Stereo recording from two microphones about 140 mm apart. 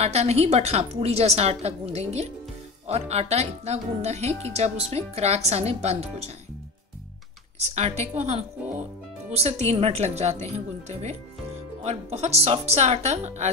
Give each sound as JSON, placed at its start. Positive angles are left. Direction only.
{"t": 0.0, "sound": "a woman's voice", "side_deg": -50}
{"t": 7.7, "sound": "a woman's voice", "side_deg": -50}